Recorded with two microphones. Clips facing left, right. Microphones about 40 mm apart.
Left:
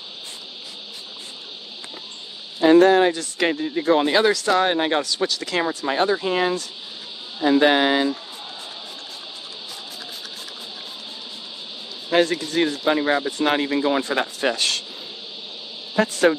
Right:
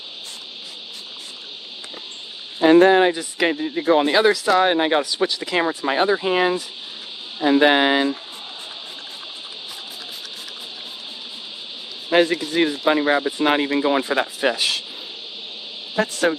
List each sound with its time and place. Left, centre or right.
2.6 s speech: right
12.1 s speech: centre
16.0 s a woman's voice: centre